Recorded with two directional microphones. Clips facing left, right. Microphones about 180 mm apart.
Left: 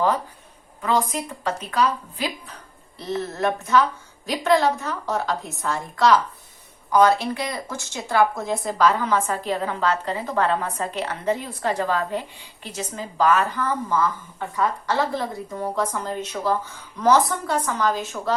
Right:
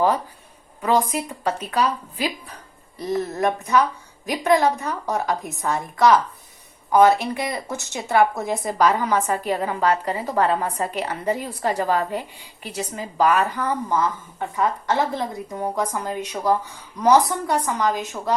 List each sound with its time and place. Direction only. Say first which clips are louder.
1.1 s a woman's voice: right 2 dB; 10° right (ahead or behind)
3.3 s a woman's voice: left 1 dB; 15° right (ahead or behind)